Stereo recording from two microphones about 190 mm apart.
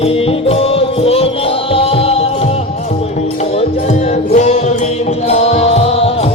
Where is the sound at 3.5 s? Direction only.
35° left (ahead or behind).